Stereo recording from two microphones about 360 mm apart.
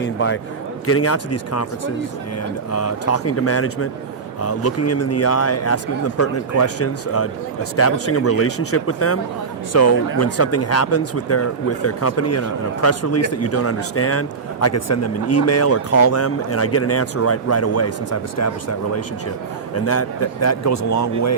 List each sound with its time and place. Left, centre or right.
0.0 s a man's voice: left
2.7 s a man's voice: left
19.8 s a man's voice: left